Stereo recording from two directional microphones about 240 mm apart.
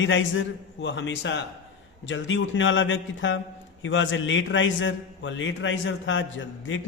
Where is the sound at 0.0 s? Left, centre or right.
Left.